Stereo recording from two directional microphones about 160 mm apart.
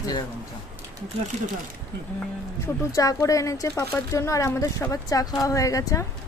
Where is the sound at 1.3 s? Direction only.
45° right (ahead or behind).